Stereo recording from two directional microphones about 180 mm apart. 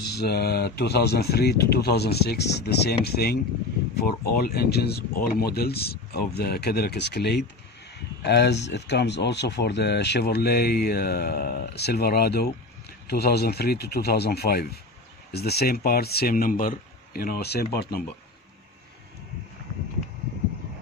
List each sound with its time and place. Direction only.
0.0 s speech: 65° left (ahead or behind)